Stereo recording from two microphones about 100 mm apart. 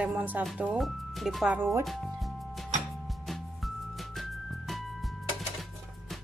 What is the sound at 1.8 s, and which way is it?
Speech, centre (ahead or behind).